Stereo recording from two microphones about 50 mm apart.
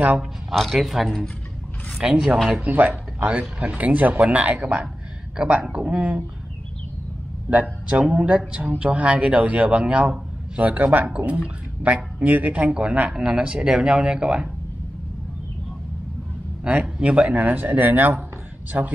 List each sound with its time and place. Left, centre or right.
0.6 s speech: centre
2.0 s speech: centre
2.5 s a man's voice: right
7.5 s a man's voice: right
16.6 s a man's voice: right